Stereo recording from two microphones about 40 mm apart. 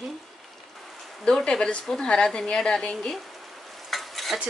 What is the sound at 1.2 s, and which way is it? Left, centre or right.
Speech, centre.